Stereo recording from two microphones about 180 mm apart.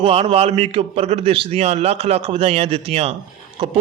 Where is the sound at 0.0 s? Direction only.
35° right (ahead or behind).